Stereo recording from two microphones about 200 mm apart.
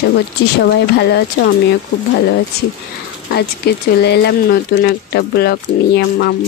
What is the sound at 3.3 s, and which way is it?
Speech, 55° left (ahead or behind).